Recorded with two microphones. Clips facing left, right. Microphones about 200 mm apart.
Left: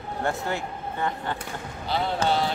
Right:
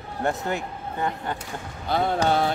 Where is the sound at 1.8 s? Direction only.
50° right (ahead or behind).